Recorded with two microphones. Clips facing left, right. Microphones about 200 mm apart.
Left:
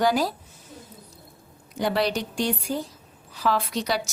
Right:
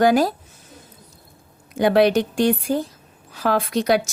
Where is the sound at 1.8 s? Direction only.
55° right (ahead or behind).